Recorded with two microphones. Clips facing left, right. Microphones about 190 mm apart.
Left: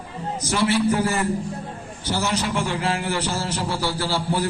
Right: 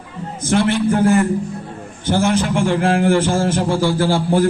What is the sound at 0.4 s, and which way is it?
A man's voice, 55° right (ahead or behind).